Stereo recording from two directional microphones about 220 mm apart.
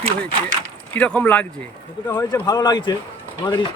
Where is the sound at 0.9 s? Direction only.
5° left (ahead or behind).